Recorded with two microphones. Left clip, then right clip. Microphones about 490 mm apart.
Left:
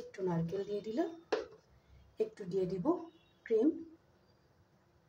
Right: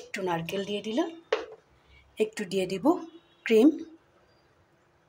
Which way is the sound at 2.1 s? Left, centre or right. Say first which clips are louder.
Right 7 dB; centre.